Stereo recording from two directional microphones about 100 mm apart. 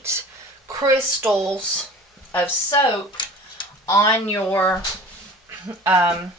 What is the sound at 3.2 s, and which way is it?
Tick-tock, 50° left (ahead or behind).